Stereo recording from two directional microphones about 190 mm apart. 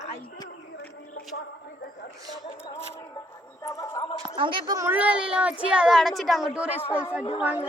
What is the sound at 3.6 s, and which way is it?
Speech, 15° left (ahead or behind).